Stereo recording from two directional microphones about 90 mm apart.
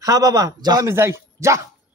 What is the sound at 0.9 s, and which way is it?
Speech, 30° right (ahead or behind).